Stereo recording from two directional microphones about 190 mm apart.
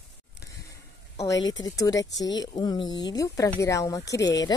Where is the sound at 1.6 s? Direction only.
20° left (ahead or behind).